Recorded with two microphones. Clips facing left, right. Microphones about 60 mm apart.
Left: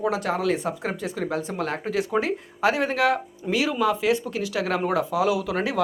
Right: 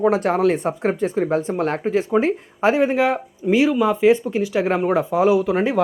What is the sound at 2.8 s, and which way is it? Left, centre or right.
Speech, centre.